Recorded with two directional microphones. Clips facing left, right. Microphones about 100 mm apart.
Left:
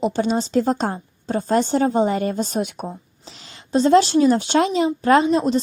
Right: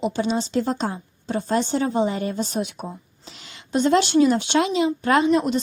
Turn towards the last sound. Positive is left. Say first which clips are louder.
# left 2 dB
turn(degrees=30)  # may be behind; listen again after turning